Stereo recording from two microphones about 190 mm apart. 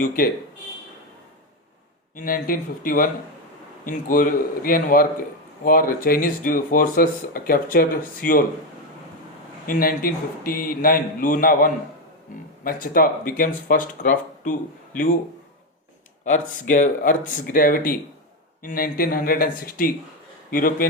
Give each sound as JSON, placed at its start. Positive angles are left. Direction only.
{"t": 2.1, "sound": "speech", "side_deg": 50}
{"t": 9.6, "sound": "speech", "side_deg": 50}
{"t": 16.2, "sound": "speech", "side_deg": 40}